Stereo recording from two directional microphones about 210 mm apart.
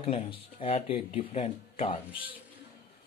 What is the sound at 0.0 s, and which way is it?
Speech, 25° left (ahead or behind).